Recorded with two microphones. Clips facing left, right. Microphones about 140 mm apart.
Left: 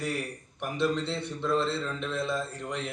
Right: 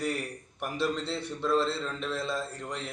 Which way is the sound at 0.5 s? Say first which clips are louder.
Left 2 dB; 5° right (ahead or behind).